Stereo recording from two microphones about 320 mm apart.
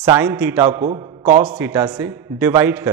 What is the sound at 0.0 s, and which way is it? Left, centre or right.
A man's voice, centre.